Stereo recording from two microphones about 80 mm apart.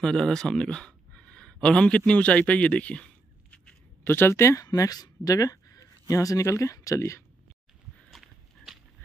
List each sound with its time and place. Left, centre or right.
0.0 s speech: centre
4.0 s speech: left
4.6 s speech: left
8.1 s horse: centre